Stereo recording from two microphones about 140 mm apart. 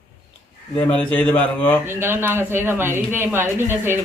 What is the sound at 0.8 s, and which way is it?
A man's voice, 10° left (ahead or behind).